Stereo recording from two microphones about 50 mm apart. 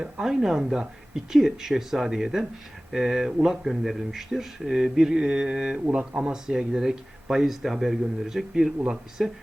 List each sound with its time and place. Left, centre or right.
0.0 s speech: centre